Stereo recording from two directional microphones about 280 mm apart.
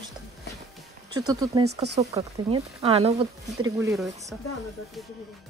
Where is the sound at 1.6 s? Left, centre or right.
Right.